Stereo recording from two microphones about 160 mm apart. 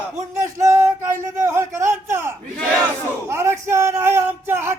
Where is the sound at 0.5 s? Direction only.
20° right (ahead or behind).